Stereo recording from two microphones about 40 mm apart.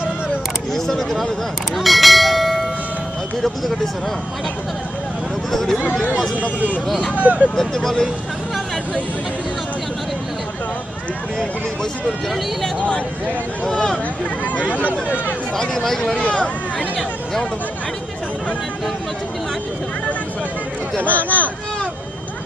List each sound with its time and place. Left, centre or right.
0.7 s speech: centre
1.8 s bell: centre
3.4 s speech: centre
5.5 s speech: centre
7.2 s speech: right
7.5 s speech: centre
13.7 s speech: centre
14.7 s speech: right
15.5 s speech: centre
16.2 s speech: left
21.1 s speech: left